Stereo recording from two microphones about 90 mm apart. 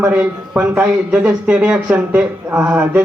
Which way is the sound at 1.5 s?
10° right (ahead or behind).